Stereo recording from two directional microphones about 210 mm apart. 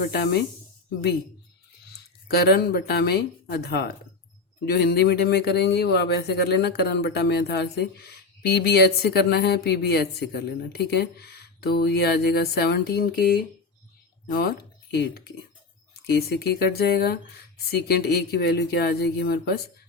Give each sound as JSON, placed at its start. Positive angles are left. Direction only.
{"t": 0.0, "sound": "speech", "side_deg": 45}
{"t": 2.2, "sound": "speech", "side_deg": 50}
{"t": 14.3, "sound": "speech", "side_deg": 45}
{"t": 16.2, "sound": "speech", "side_deg": 50}